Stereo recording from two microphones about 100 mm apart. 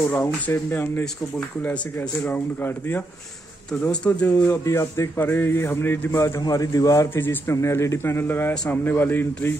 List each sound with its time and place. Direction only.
0.1 s speech: 20° left (ahead or behind)
4.5 s a man's voice: 30° left (ahead or behind)
7.2 s speech: 25° left (ahead or behind)